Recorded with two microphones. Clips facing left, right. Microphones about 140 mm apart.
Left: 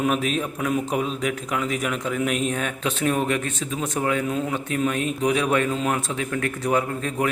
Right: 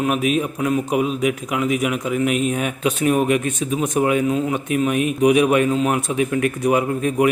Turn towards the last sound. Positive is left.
turn(degrees=-15)  # may be behind; listen again after turning